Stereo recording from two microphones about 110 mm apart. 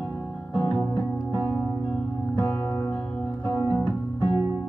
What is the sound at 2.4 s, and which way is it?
Music, 35° left (ahead or behind).